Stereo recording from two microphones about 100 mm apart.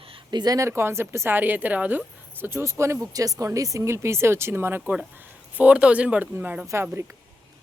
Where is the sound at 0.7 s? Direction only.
25° right (ahead or behind).